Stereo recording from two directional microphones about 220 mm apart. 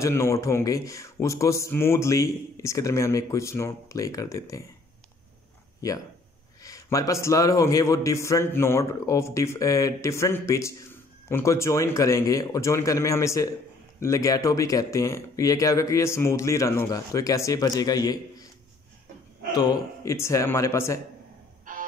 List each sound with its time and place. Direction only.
0.0 s a man's voice: 10° left (ahead or behind)
6.6 s a man's voice: 15° left (ahead or behind)
19.5 s a man's voice: 15° left (ahead or behind)
21.7 s music: 35° right (ahead or behind)